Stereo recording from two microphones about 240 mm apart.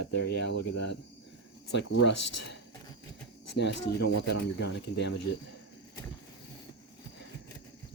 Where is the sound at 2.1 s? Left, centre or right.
Left.